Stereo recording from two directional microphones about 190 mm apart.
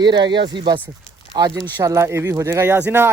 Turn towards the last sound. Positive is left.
turn(degrees=-10)  # may be behind; listen again after turning